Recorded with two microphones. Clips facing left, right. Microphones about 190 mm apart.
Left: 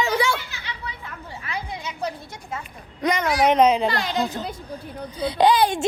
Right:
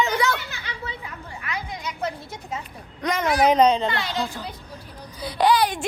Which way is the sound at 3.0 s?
Centre (ahead or behind).